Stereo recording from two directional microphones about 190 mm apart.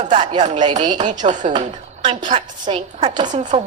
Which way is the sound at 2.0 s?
25° right (ahead or behind).